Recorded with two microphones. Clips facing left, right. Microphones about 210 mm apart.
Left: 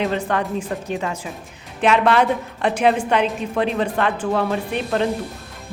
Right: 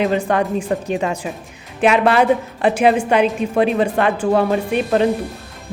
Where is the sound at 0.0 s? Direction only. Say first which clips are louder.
Right 4 dB; 10° right (ahead or behind).